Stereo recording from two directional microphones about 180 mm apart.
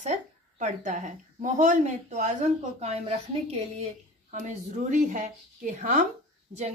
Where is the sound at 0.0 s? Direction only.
40° right (ahead or behind).